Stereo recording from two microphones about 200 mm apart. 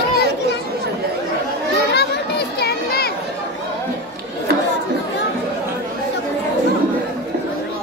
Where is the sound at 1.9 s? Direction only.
55° left (ahead or behind).